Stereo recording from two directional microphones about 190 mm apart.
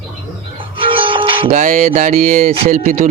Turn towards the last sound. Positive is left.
turn(degrees=-45)  # may be behind; listen again after turning